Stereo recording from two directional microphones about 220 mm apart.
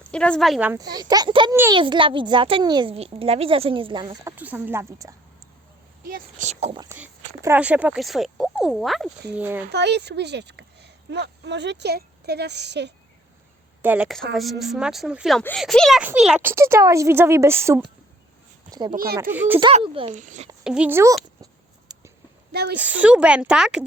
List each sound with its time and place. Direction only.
0.0 s a child's voice: 5° left (ahead or behind); by 5.1 s 15° right (ahead or behind)
6.1 s speech: 35° right (ahead or behind)
6.7 s speech: 10° right (ahead or behind)
9.7 s speech: 50° right (ahead or behind)
13.8 s speech: 5° right (ahead or behind)
19.3 s speech: 10° right (ahead or behind)
19.5 s a child's voice: 20° right (ahead or behind)
20.7 s speech: 5° right (ahead or behind)
21.4 s a sound: 15° right (ahead or behind)
22.5 s a woman's voice: 50° right (ahead or behind)
22.8 s speech: 5° right (ahead or behind)